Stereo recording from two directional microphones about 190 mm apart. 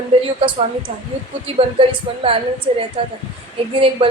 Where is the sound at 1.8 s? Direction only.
30° right (ahead or behind).